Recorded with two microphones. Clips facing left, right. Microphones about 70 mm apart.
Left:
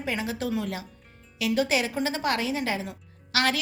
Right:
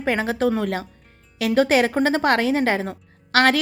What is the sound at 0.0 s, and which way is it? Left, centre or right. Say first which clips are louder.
A woman's voice: right 9 dB; right.